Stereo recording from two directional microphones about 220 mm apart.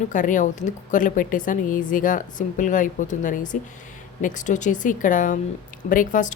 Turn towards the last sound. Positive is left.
turn(degrees=35)  # may be behind; listen again after turning